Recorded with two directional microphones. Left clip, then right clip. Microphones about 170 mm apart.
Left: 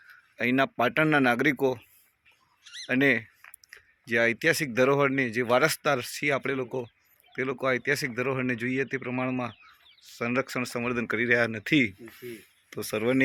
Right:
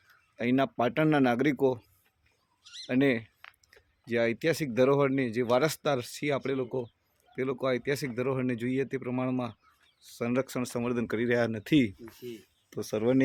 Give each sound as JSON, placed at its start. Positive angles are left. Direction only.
{"t": 0.3, "sound": "speech", "side_deg": -5}